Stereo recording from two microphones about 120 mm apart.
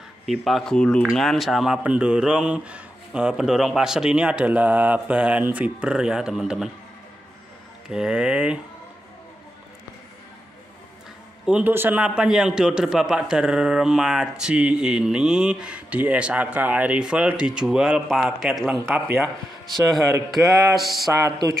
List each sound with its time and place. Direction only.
0.3 s a man's voice: centre (ahead or behind)
7.9 s a man's voice: 5° right (ahead or behind)
11.4 s a man's voice: 10° right (ahead or behind)
20.2 s speech: centre (ahead or behind)
21.1 s music: 25° right (ahead or behind)